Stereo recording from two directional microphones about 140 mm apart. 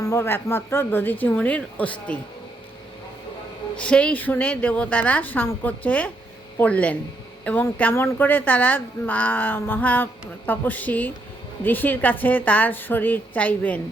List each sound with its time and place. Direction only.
0.0 s a woman's voice: 20° left (ahead or behind)
3.8 s a woman's voice: 10° left (ahead or behind)